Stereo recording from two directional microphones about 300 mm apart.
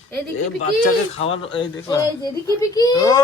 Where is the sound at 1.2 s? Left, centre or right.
Centre.